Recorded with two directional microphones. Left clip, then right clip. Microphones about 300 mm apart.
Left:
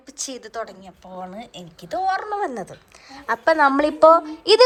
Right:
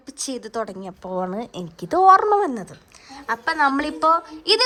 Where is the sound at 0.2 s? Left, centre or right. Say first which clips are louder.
Right 3 dB; centre.